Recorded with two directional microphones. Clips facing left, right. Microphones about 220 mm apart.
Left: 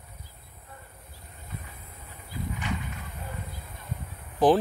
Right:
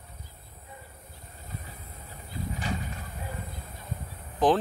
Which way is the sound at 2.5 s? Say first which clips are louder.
Right 1 dB; 35° right (ahead or behind).